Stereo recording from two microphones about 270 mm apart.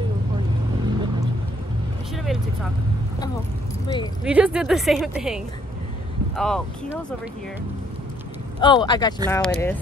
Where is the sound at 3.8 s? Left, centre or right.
Centre.